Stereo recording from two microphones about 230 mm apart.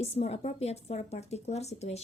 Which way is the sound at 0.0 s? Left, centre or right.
Left.